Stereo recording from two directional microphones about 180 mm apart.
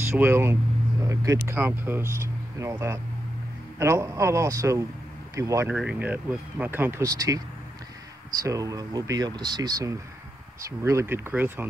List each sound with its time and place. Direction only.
0.0 s speech: 15° right (ahead or behind)